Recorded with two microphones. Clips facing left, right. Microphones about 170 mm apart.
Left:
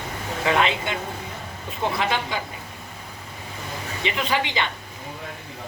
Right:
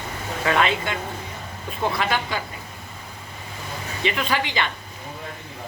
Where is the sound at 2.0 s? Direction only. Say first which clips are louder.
Even; 20° left (ahead or behind).